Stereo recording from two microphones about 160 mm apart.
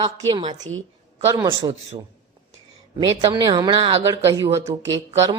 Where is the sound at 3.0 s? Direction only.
30° right (ahead or behind).